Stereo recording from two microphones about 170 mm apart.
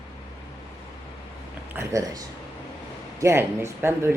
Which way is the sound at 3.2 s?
15° right (ahead or behind).